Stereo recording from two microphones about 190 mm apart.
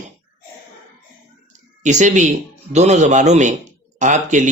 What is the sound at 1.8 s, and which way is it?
Speech, 40° right (ahead or behind).